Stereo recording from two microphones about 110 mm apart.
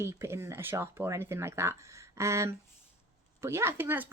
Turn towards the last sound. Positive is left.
turn(degrees=-20)  # may be behind; listen again after turning